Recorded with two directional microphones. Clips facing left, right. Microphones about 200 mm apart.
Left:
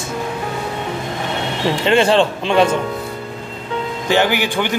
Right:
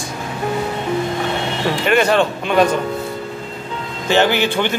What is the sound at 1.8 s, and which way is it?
Speech, 25° left (ahead or behind).